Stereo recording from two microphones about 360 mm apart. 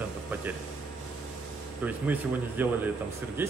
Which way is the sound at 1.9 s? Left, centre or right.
Centre.